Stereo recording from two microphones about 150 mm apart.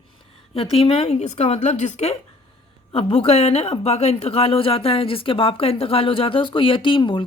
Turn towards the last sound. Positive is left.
turn(degrees=35)  # may be behind; listen again after turning